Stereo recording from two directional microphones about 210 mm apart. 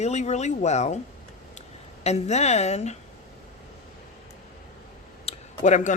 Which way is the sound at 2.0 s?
30° left (ahead or behind).